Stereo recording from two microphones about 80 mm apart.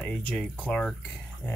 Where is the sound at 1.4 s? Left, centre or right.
Left.